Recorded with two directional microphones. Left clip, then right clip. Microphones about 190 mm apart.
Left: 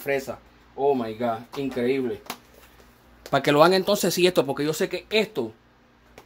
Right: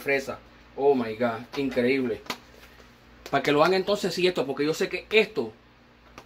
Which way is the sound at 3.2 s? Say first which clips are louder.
Left 4 dB; 55° left (ahead or behind).